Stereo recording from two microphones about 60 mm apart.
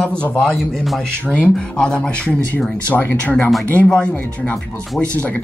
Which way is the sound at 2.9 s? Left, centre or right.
Left.